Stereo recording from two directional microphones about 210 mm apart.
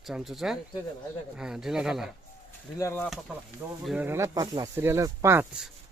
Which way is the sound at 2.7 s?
10° left (ahead or behind).